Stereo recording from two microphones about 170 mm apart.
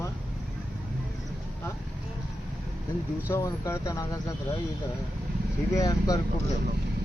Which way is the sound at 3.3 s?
15° left (ahead or behind).